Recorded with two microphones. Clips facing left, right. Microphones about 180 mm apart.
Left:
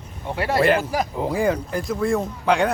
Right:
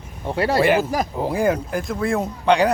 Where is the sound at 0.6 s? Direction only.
5° right (ahead or behind).